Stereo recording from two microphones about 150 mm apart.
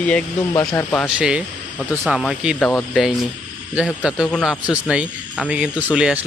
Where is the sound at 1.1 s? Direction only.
5° right (ahead or behind).